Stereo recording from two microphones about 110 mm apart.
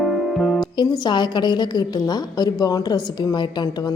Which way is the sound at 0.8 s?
45° left (ahead or behind).